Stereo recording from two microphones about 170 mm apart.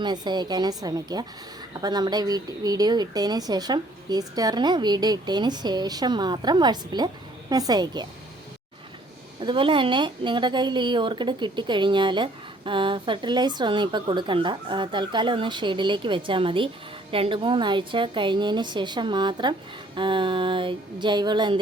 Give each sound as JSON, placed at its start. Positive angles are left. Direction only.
{"t": 0.0, "sound": "a woman's voice", "side_deg": -25}
{"t": 9.4, "sound": "a woman's voice", "side_deg": -30}